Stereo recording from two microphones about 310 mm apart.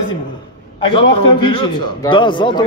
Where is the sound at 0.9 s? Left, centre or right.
Centre.